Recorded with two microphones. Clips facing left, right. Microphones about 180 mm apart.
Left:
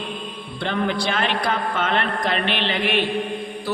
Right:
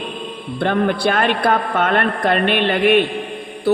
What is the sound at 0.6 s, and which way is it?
A man's voice, 55° right (ahead or behind).